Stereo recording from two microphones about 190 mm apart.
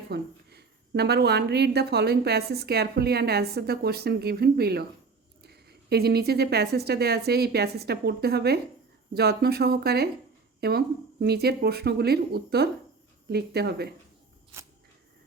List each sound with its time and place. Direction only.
0.1 s a woman's voice: 60° right (ahead or behind)